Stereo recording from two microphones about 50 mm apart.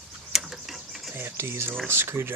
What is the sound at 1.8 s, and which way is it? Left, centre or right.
Speech, right.